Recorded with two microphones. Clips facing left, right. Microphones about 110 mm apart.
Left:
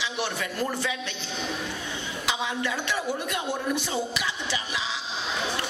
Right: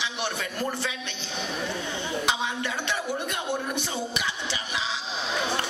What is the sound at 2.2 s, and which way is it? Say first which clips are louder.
Speech: left 2 dB; 20° right (ahead or behind).